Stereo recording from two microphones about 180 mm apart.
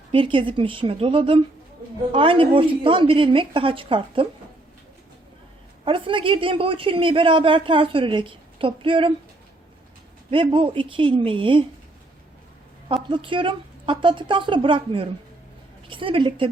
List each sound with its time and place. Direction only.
0.1 s a woman's voice: 30° right (ahead or behind)
5.8 s a woman's voice: 30° right (ahead or behind)
10.3 s a woman's voice: 30° right (ahead or behind)
12.9 s a woman's voice: 30° right (ahead or behind)